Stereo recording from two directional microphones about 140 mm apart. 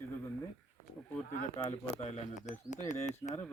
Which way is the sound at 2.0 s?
55° left (ahead or behind).